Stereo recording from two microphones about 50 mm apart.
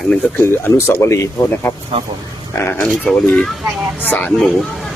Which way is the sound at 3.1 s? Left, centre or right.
Centre.